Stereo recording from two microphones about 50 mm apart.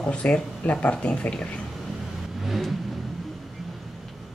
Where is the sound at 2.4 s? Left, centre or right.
Centre.